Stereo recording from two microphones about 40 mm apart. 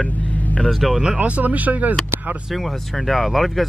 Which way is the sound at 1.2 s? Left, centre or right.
Right.